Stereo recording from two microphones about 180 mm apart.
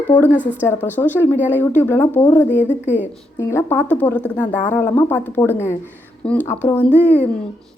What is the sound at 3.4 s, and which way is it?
A woman's voice, 15° left (ahead or behind).